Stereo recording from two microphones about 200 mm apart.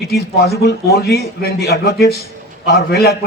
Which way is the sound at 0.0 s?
50° left (ahead or behind).